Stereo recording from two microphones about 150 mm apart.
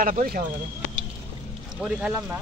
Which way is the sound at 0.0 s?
65° right (ahead or behind).